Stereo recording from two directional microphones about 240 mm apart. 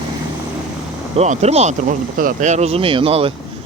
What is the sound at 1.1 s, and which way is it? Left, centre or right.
Speech, right.